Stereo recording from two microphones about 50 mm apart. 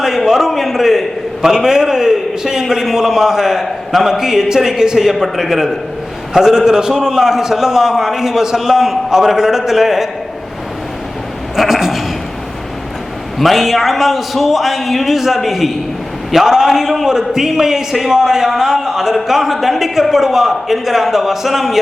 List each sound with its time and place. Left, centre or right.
0.0 s a sound: centre
3.6 s a man's voice: centre
11.5 s bleat: centre
13.4 s a man's voice: centre